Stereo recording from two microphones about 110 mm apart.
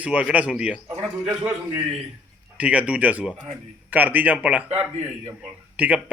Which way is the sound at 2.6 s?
10° right (ahead or behind).